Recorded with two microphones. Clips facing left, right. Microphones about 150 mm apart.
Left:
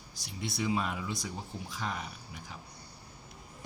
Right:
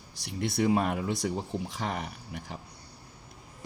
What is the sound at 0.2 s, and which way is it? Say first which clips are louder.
Speech: right 7 dB; 60° right (ahead or behind).